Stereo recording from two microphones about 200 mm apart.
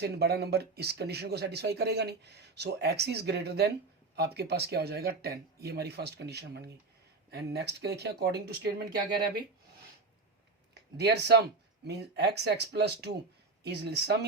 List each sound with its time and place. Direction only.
0.0 s speech: 55° right (ahead or behind)
10.9 s speech: 55° right (ahead or behind)